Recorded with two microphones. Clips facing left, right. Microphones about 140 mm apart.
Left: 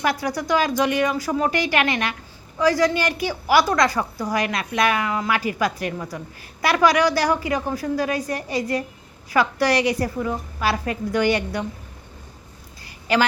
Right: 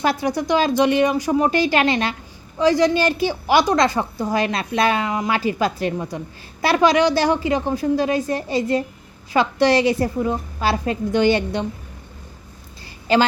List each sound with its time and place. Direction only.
0.0 s a woman's voice: 25° right (ahead or behind)
13.1 s a woman's voice: 30° right (ahead or behind)